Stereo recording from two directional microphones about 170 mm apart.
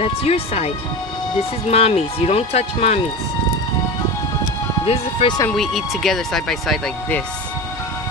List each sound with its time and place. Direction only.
0.0 s speech: 35° left (ahead or behind)
1.7 s speech: 40° left (ahead or behind)
4.8 s speech: 30° left (ahead or behind)
5.5 s speech: centre (ahead or behind)